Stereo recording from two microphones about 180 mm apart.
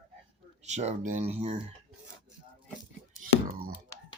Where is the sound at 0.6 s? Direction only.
40° right (ahead or behind).